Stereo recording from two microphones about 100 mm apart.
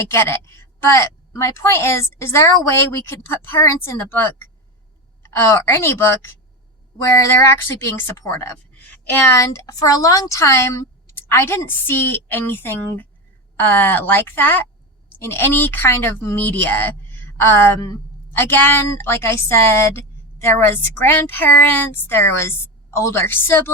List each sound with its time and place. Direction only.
0.1 s a woman's voice: 25° left (ahead or behind)
8.8 s a woman's voice: 20° left (ahead or behind); by 18.0 s 35° left (ahead or behind)
18.3 s a woman's voice: 20° left (ahead or behind)